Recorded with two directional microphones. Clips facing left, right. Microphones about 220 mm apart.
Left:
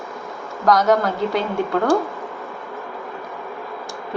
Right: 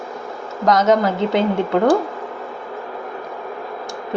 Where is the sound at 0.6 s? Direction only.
20° right (ahead or behind).